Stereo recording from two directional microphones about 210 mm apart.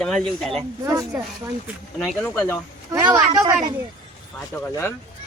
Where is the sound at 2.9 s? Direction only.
15° right (ahead or behind).